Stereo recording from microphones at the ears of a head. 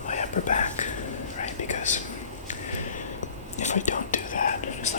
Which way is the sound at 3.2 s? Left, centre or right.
Left.